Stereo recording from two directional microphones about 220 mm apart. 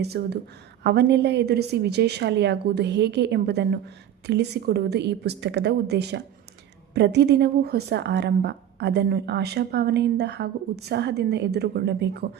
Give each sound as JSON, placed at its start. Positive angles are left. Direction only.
{"t": 0.0, "sound": "a woman's voice", "side_deg": -45}